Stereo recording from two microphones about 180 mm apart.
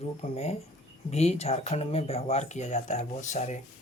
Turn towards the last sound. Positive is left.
turn(degrees=40)  # may be behind; listen again after turning